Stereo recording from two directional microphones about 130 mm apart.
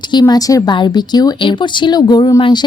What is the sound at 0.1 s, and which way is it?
A woman's voice, 30° left (ahead or behind).